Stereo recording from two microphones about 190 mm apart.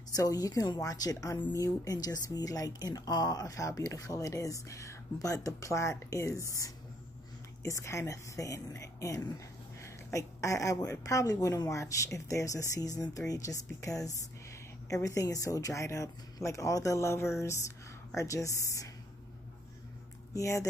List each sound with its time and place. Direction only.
0.1 s speech: 20° left (ahead or behind)
7.6 s speech: 15° left (ahead or behind)
20.3 s speech: 15° left (ahead or behind)